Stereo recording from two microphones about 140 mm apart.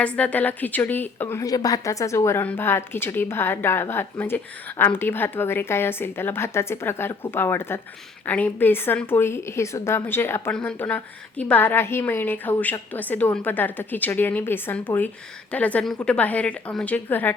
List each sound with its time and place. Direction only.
0.0 s a woman's voice: 10° left (ahead or behind)